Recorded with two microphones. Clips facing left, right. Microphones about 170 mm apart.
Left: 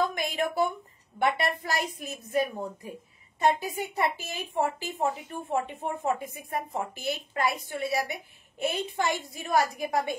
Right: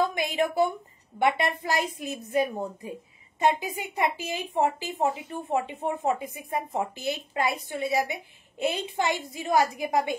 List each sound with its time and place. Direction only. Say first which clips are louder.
0.1 s a woman's voice: right 3 dB; 20° right (ahead or behind)